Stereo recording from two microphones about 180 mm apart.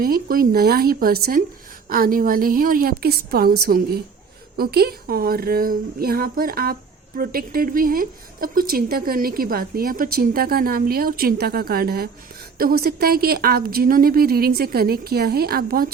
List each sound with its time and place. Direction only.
0.0 s a woman's voice: 55° right (ahead or behind)